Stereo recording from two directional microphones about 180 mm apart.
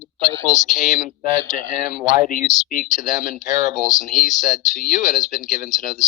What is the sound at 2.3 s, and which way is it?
Speech, 50° left (ahead or behind).